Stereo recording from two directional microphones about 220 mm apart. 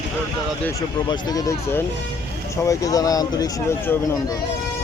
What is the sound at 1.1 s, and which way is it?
Speech, 15° left (ahead or behind).